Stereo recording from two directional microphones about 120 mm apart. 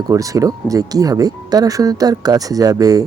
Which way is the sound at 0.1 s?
30° right (ahead or behind).